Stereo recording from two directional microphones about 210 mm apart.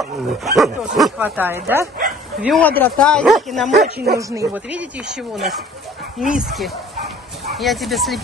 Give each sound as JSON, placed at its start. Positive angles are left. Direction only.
{"t": 0.0, "sound": "speech", "side_deg": 0}
{"t": 2.4, "sound": "speech", "side_deg": 0}
{"t": 3.8, "sound": "speech", "side_deg": -50}
{"t": 4.2, "sound": "speech", "side_deg": -15}